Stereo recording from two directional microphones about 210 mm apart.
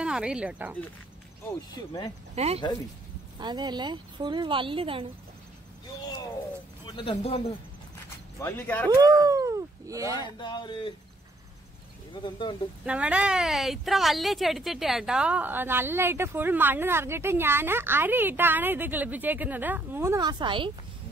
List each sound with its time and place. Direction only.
0.0 s speech: 5° right (ahead or behind)
1.8 s speech: 15° left (ahead or behind)
2.3 s speech: 30° right (ahead or behind)
6.9 s a man's voice: 25° left (ahead or behind)
8.4 s speech: 10° left (ahead or behind)
8.9 s speech: 15° right (ahead or behind)
10.4 s a man's voice: 20° left (ahead or behind)
12.1 s a man's voice: 20° left (ahead or behind)
12.8 s a woman's voice: 5° right (ahead or behind); by 20.7 s 25° right (ahead or behind)